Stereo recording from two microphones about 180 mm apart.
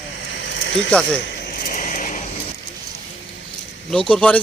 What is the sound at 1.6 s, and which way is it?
Vehicle, 50° left (ahead or behind).